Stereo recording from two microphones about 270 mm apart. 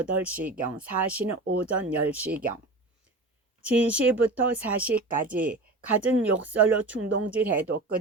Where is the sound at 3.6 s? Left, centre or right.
Centre.